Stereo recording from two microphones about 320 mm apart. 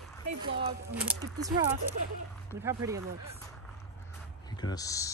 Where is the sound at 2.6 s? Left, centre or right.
Centre.